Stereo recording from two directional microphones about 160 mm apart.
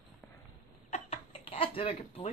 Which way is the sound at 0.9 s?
40° left (ahead or behind).